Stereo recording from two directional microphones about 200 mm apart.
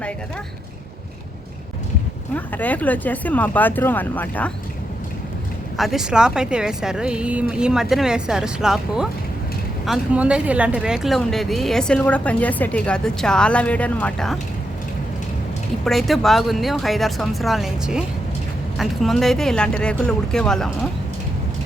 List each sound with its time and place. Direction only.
2.3 s speech: 10° left (ahead or behind)
5.7 s speech: centre (ahead or behind)
15.8 s speech: centre (ahead or behind)